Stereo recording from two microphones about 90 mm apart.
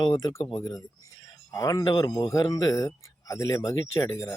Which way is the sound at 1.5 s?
40° left (ahead or behind).